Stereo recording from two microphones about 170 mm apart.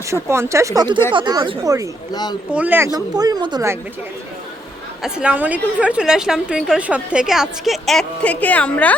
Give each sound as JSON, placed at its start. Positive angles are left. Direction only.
{"t": 0.1, "sound": "speech", "side_deg": -15}
{"t": 2.5, "sound": "speech", "side_deg": -10}
{"t": 5.0, "sound": "a woman's voice", "side_deg": -5}